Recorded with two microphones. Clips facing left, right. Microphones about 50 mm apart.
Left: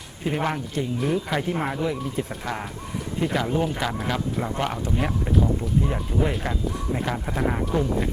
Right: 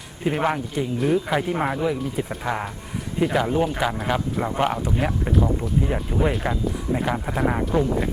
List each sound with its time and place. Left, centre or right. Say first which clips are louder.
0.3 s speech: right 3 dB; centre